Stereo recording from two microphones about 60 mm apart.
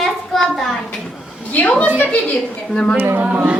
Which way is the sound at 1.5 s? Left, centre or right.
Left.